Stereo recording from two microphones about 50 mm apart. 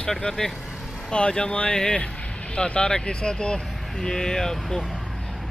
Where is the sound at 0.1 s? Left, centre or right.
Centre.